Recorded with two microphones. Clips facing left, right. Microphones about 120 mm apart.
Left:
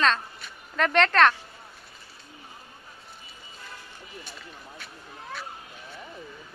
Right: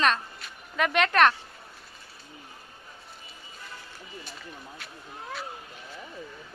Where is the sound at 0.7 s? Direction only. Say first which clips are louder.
Left 2 dB; 10° right (ahead or behind).